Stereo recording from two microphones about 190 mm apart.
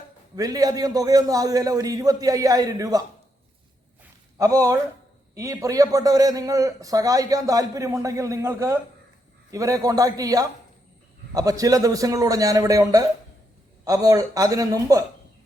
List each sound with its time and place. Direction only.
0.3 s a man's voice: 20° right (ahead or behind)
4.4 s a man's voice: 15° right (ahead or behind)